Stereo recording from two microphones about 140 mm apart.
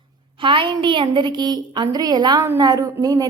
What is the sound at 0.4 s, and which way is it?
A woman's voice, 35° right (ahead or behind).